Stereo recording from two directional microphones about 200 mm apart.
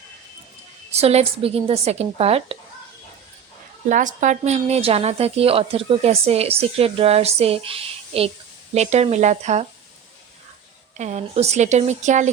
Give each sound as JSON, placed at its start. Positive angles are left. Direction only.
{"t": 0.9, "sound": "a woman's voice", "side_deg": -30}
{"t": 3.8, "sound": "a woman's voice", "side_deg": -40}
{"t": 10.9, "sound": "a woman's voice", "side_deg": -35}